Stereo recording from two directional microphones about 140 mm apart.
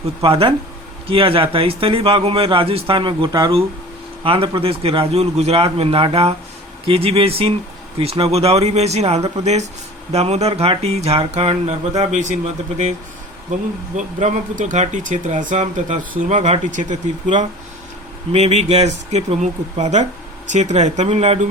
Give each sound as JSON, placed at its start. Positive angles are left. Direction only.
{"t": 0.2, "sound": "a man's voice", "side_deg": -40}
{"t": 4.2, "sound": "a man's voice", "side_deg": -40}
{"t": 13.9, "sound": "speech", "side_deg": -60}
{"t": 18.3, "sound": "a man's voice", "side_deg": -50}